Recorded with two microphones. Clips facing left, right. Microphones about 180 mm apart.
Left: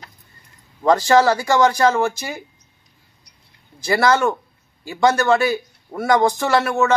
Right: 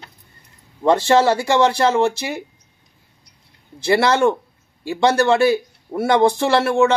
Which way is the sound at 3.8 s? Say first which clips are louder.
Right 2 dB; 30° right (ahead or behind).